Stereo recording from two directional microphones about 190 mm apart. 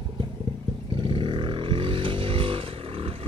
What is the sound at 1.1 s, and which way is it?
Vehicle, 25° right (ahead or behind).